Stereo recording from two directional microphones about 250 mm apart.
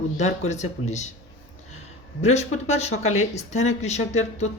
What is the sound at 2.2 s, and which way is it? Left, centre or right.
Speech, left.